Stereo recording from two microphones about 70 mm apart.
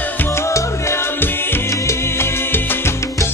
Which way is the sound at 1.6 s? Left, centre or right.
Left.